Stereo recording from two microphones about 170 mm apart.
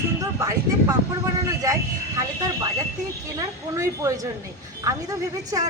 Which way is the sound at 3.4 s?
20° right (ahead or behind).